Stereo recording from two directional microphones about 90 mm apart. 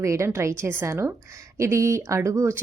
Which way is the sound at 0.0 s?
35° right (ahead or behind).